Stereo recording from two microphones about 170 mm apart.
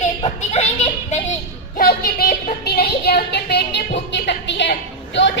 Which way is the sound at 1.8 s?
60° left (ahead or behind).